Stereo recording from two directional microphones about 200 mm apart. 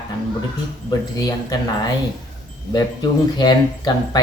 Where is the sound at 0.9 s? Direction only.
20° left (ahead or behind).